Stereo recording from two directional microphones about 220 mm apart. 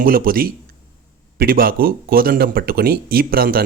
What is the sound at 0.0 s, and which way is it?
Speech, 40° right (ahead or behind).